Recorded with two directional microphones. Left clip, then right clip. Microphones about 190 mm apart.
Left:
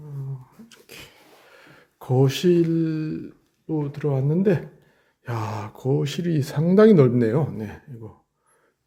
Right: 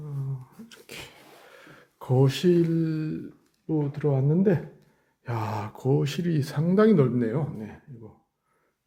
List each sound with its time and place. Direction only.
0.7 s a sound: 20° right (ahead or behind)
1.5 s speech: 5° right (ahead or behind)
3.7 s speech: centre (ahead or behind); by 6.8 s 25° left (ahead or behind)
6.8 s a man's voice: 40° left (ahead or behind)